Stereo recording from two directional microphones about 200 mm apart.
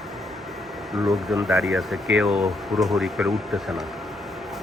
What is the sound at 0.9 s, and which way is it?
Speech, centre (ahead or behind).